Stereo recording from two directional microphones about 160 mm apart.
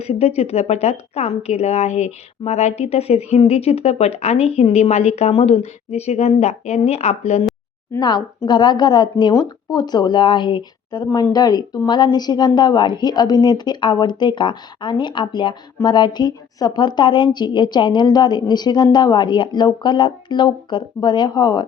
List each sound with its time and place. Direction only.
0.0 s speech: 40° left (ahead or behind)
7.9 s speech: 25° left (ahead or behind)